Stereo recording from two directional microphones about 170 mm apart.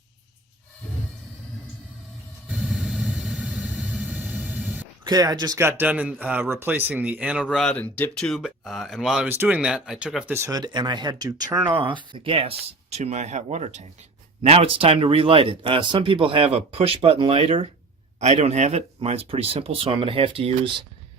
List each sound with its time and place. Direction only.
2.5 s vehicle: centre (ahead or behind)
5.0 s speech: 25° right (ahead or behind); by 7.4 s 5° right (ahead or behind)
7.4 s speech: 5° left (ahead or behind)
10.3 s speech: 20° right (ahead or behind)